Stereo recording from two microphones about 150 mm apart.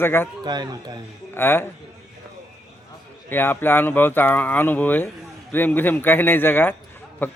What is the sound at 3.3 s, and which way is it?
A man's voice, 15° left (ahead or behind).